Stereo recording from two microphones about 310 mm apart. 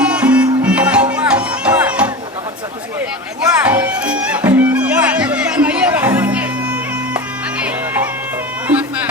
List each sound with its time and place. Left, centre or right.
0.0 s music: centre
3.6 s music: centre
8.6 s music: centre